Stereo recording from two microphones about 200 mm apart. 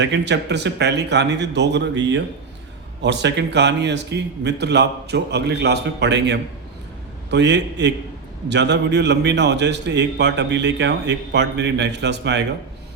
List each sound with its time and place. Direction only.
0.0 s a man's voice: 60° right (ahead or behind)